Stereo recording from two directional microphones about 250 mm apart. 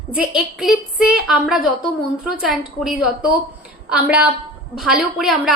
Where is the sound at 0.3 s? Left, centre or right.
Centre.